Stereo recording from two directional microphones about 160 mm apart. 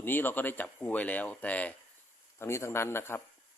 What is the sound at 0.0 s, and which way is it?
Speech, 15° left (ahead or behind).